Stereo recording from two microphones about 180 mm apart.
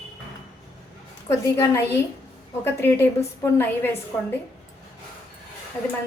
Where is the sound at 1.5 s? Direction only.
15° left (ahead or behind).